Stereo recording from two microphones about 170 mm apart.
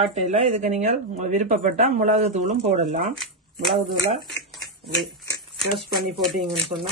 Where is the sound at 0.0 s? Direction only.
40° right (ahead or behind).